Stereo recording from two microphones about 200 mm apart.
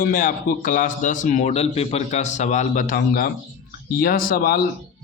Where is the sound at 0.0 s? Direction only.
45° left (ahead or behind).